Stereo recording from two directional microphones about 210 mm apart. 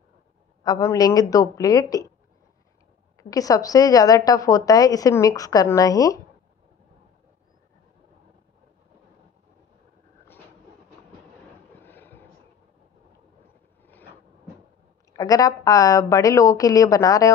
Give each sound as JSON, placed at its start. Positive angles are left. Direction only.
{"t": 0.7, "sound": "a woman's voice", "side_deg": 15}
{"t": 3.2, "sound": "a woman's voice", "side_deg": 15}
{"t": 11.8, "sound": "vehicle", "side_deg": 10}
{"t": 15.1, "sound": "a woman's voice", "side_deg": 15}